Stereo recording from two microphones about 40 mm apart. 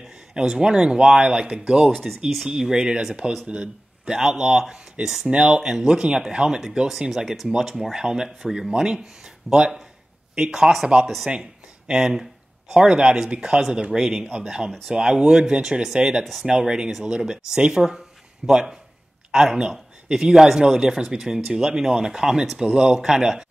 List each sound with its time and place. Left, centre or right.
0.3 s a man's voice: centre
1.9 s speech: centre
2.7 s a man's voice: centre
3.4 s a man's voice: right
4.1 s a man's voice: centre
11.9 s a sound: centre
12.7 s a man's voice: centre